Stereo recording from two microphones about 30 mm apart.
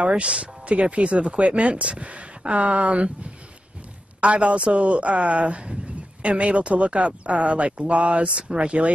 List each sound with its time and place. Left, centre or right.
0.1 s speech: right
4.2 s speech: right
8.3 s speech: right